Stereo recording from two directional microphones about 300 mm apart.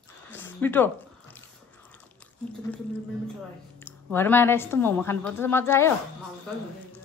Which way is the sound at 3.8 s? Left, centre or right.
Centre.